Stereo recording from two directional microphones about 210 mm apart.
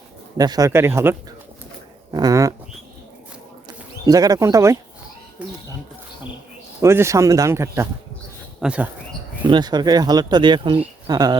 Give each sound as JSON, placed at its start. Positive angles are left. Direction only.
{"t": 0.3, "sound": "speech", "side_deg": -20}
{"t": 2.1, "sound": "speech", "side_deg": -15}
{"t": 4.0, "sound": "speech", "side_deg": -15}
{"t": 6.8, "sound": "speech", "side_deg": -15}
{"t": 9.4, "sound": "speech", "side_deg": -20}